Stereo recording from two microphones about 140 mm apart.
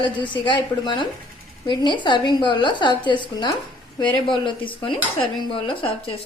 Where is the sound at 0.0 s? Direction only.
35° left (ahead or behind).